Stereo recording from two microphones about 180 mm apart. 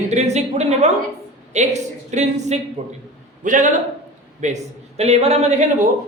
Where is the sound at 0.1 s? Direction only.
40° right (ahead or behind).